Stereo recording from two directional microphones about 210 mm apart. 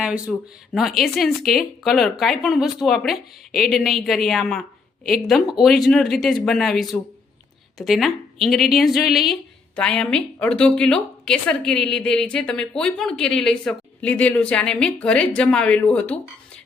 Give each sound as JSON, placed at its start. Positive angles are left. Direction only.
{"t": 0.0, "sound": "a woman's voice", "side_deg": -5}